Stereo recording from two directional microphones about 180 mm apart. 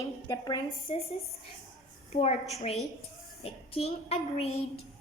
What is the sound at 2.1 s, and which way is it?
A woman's voice, 35° left (ahead or behind).